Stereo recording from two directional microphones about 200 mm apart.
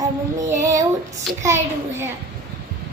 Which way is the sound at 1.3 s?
Centre (ahead or behind).